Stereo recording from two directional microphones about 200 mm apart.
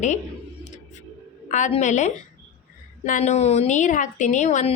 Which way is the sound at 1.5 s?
40° left (ahead or behind).